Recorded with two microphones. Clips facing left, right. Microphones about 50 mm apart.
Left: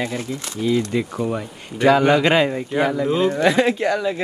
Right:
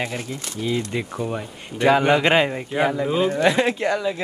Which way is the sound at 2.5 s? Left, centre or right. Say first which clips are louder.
Left 2 dB; centre.